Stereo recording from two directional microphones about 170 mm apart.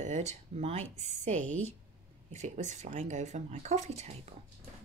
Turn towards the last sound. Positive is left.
turn(degrees=-40)  # may be behind; listen again after turning